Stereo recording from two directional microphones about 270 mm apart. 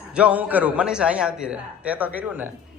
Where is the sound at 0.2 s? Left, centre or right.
Centre.